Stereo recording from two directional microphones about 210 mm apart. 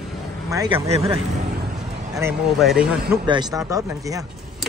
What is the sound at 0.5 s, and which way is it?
Speech, 15° right (ahead or behind).